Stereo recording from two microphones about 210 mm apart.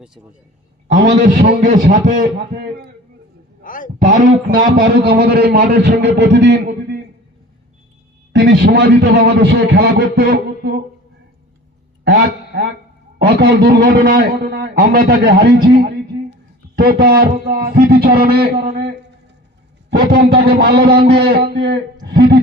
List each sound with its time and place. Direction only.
1.2 s a man's voice: 35° right (ahead or behind)
3.6 s guitar: 40° left (ahead or behind)
4.0 s a man's voice: 35° right (ahead or behind); by 6.6 s 55° right (ahead or behind)
8.3 s a man's voice: 55° right (ahead or behind)
12.5 s a man's voice: 50° right (ahead or behind)
19.9 s a man's voice: 45° right (ahead or behind)